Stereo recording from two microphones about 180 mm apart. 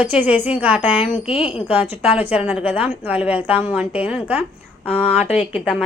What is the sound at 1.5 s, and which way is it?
A woman's voice, 10° right (ahead or behind).